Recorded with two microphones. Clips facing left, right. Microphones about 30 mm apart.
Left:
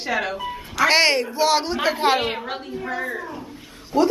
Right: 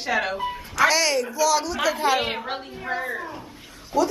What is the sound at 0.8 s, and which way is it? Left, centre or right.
A woman's voice, left.